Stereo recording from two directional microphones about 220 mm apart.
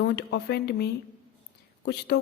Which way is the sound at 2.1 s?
50° left (ahead or behind).